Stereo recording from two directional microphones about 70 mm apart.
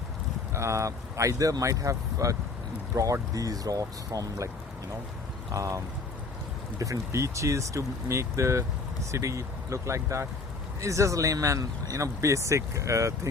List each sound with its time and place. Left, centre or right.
0.5 s speech: right
5.5 s speech: right